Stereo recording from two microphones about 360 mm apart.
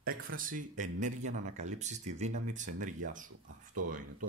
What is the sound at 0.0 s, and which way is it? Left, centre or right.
Speech, right.